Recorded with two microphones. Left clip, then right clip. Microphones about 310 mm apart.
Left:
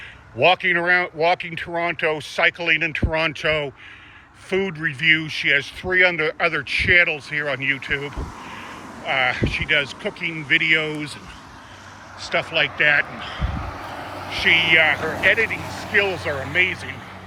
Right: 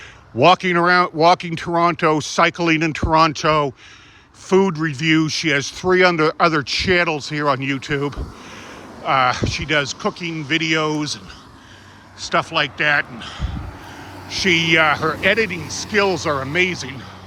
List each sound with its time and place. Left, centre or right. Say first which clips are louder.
0.4 s speech: right 3 dB; centre
9.1 s speech: right 3 dB; centre
12.2 s speech: right 2 dB; centre
14.8 s speech: right 1 dB; right
16.0 s speech: right 3 dB; centre